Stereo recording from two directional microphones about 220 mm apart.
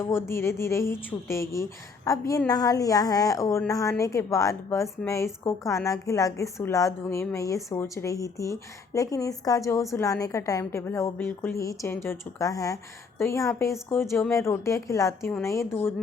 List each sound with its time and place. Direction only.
0.0 s a woman's voice: 10° left (ahead or behind)